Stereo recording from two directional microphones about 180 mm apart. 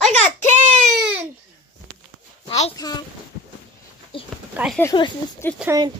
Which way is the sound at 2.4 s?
35° left (ahead or behind).